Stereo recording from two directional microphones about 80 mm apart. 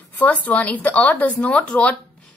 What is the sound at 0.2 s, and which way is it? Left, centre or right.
A woman's voice, centre.